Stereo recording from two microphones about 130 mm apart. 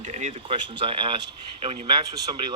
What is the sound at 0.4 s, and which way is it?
Speech, 45° right (ahead or behind).